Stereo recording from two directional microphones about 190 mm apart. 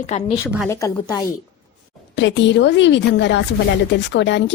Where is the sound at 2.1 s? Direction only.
70° left (ahead or behind).